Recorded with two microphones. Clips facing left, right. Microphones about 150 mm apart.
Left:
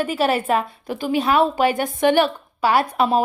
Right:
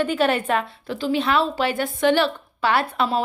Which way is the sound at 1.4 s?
45° left (ahead or behind).